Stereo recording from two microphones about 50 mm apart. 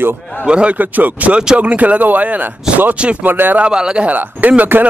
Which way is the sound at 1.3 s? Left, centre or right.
Centre.